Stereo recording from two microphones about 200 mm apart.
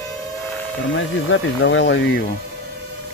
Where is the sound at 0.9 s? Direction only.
70° left (ahead or behind).